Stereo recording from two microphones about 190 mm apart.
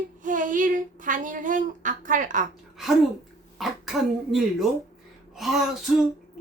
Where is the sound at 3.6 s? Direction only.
Centre (ahead or behind).